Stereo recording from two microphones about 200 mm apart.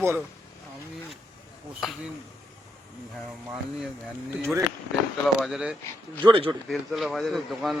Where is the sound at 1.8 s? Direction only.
Centre (ahead or behind).